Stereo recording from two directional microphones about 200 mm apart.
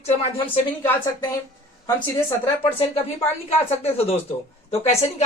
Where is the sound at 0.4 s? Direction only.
10° left (ahead or behind).